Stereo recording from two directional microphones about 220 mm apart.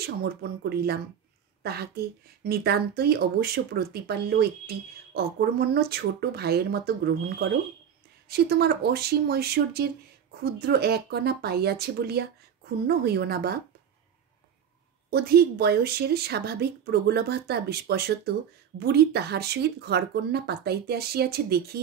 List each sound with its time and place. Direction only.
0.0 s speech: 45° right (ahead or behind)
15.0 s speech: 45° right (ahead or behind)